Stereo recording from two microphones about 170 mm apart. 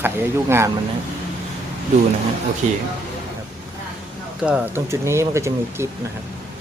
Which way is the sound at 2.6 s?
45° right (ahead or behind).